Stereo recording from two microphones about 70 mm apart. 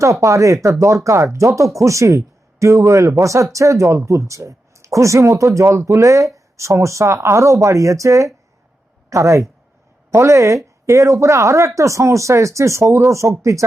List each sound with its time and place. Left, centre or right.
0.0 s speech: right